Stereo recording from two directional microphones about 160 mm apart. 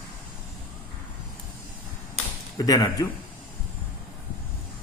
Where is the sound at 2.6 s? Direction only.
20° left (ahead or behind).